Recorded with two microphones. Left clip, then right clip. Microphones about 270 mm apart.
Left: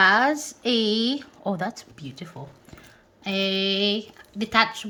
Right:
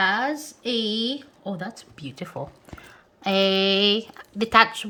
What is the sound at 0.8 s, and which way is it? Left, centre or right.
Speech, left.